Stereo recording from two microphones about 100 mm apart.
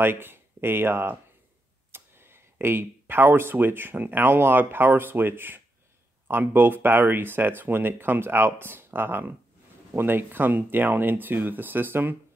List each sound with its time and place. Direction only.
0.0 s speech: 20° right (ahead or behind)